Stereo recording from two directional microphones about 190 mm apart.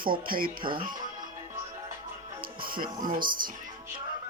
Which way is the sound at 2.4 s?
50° right (ahead or behind).